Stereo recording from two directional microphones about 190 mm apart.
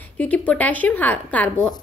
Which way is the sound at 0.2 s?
5° left (ahead or behind).